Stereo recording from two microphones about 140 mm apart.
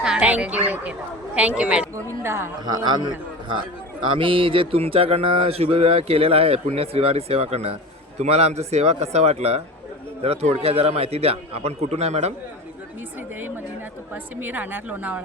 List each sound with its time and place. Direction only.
0.0 s a woman's voice: 5° right (ahead or behind)
2.2 s a woman's voice: 20° right (ahead or behind)
2.6 s a man's voice: 30° right (ahead or behind)
4.2 s mantra: 40° right (ahead or behind)
14.1 s a woman's voice: 15° right (ahead or behind)